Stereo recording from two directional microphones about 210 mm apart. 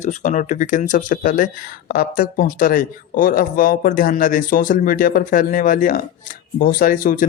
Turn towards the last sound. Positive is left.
turn(degrees=40)  # may be behind; listen again after turning